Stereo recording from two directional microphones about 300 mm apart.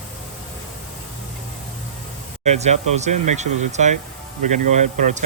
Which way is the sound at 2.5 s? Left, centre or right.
Right.